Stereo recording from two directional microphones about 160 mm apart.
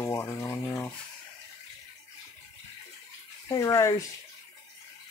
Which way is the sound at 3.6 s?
20° left (ahead or behind).